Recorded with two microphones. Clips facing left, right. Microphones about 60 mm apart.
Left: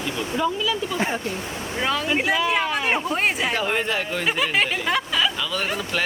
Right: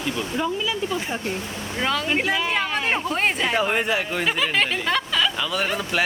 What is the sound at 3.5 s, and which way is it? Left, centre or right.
Speech, centre.